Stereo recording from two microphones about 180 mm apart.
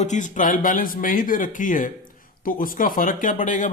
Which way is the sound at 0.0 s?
45° left (ahead or behind).